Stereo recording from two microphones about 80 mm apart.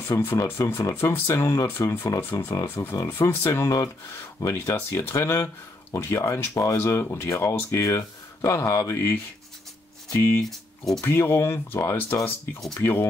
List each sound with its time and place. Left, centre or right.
0.1 s speech: left